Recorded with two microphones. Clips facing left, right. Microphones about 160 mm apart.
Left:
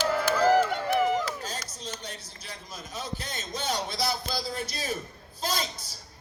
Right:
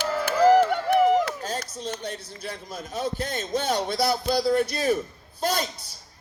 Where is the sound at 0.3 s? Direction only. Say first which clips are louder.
Right 6 dB; 60° right (ahead or behind).